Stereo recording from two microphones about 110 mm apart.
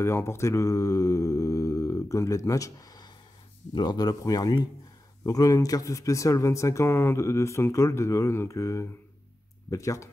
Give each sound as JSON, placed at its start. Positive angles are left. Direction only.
{"t": 0.0, "sound": "mantra", "side_deg": 25}
{"t": 3.7, "sound": "speech", "side_deg": 40}